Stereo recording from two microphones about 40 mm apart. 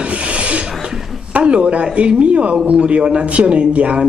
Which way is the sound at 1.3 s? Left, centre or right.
Right.